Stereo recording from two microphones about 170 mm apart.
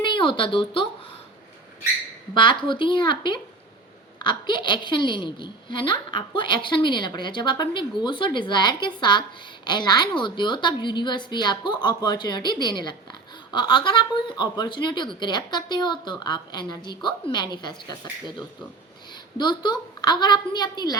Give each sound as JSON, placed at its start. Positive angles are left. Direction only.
{"t": 0.0, "sound": "speech", "side_deg": 30}
{"t": 2.3, "sound": "a woman's voice", "side_deg": 30}